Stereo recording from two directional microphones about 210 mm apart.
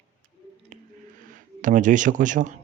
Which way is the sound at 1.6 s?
40° right (ahead or behind).